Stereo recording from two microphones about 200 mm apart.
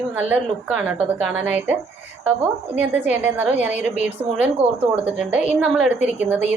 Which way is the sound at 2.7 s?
10° right (ahead or behind).